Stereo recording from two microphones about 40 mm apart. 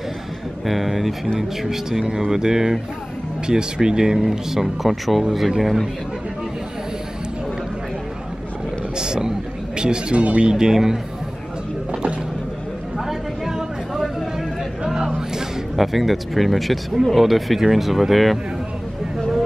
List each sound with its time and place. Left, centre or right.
0.7 s speech: centre
8.9 s a sound: centre
9.8 s speech: right
10.5 s speech: centre
11.9 s music: right
13.5 s a sound: centre
15.7 s speech: centre